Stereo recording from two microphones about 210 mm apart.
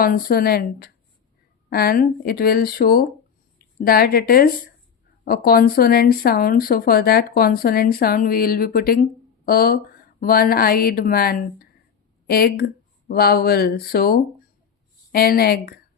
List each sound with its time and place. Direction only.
0.0 s speech: 45° left (ahead or behind)